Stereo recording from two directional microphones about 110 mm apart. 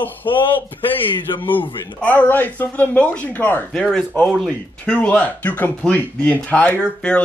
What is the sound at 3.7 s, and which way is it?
Speech, 5° left (ahead or behind).